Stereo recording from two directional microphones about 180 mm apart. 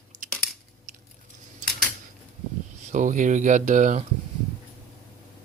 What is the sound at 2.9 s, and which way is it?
Speech, 45° right (ahead or behind).